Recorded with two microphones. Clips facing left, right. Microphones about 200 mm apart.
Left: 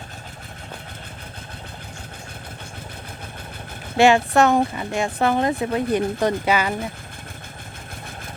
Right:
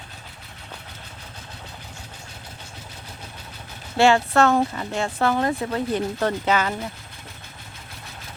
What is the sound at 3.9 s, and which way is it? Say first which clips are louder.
Speech: left 2 dB; 15° left (ahead or behind).